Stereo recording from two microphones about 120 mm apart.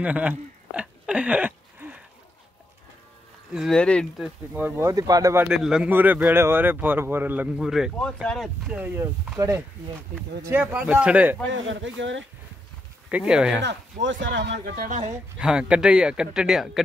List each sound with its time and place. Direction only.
0.0 s a sound: 10° right (ahead or behind)
3.5 s speech: 5° left (ahead or behind)
4.2 s speech: 15° right (ahead or behind)
4.8 s speech: 30° right (ahead or behind)
5.5 s speech: 5° right (ahead or behind)
7.5 s speech: 5° right (ahead or behind)
8.7 s speech: 15° right (ahead or behind)
10.4 s speech: 15° right (ahead or behind)
13.1 s speech: 5° right (ahead or behind)
13.9 s speech: 90° right
15.3 s speech: 10° right (ahead or behind)